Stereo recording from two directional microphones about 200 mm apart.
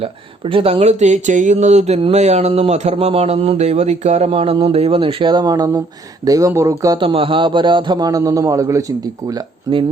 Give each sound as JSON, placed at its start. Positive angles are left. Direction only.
{"t": 0.0, "sound": "speech", "side_deg": -30}